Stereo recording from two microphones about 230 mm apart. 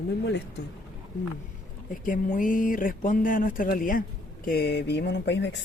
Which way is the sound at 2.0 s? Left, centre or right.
Left.